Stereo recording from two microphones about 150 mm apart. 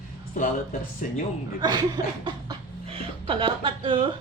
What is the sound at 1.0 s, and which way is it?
Speech, 55° left (ahead or behind).